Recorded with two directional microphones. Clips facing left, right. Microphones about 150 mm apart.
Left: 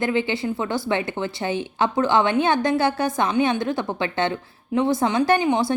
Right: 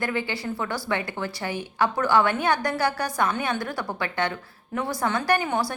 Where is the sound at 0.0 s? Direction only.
20° left (ahead or behind).